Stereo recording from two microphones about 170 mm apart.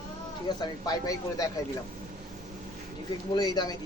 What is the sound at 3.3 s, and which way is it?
Speech, 25° left (ahead or behind).